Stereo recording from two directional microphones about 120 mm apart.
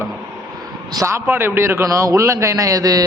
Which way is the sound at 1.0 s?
25° right (ahead or behind).